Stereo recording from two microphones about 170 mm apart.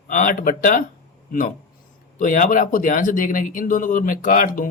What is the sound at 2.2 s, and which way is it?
Speech, 50° left (ahead or behind).